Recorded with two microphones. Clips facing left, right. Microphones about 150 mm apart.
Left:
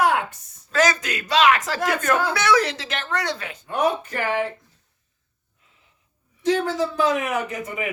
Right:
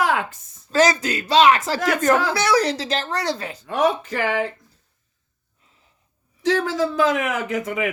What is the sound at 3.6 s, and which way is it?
Speech, 90° right.